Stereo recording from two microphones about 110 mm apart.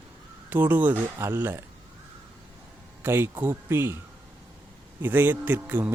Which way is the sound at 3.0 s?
20° right (ahead or behind).